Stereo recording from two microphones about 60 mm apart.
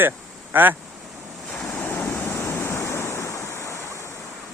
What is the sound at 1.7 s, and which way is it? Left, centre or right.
Waves, left.